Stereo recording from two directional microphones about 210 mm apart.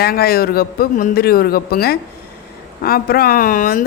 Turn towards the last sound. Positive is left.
turn(degrees=40)  # may be behind; listen again after turning